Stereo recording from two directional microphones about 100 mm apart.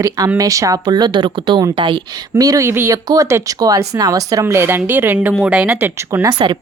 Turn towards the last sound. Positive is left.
turn(degrees=-30)  # may be behind; listen again after turning